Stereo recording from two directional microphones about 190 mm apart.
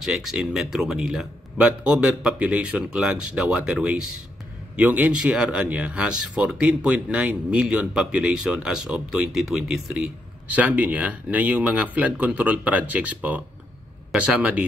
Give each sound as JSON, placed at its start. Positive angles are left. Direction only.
{"t": 0.0, "sound": "speech", "side_deg": 0}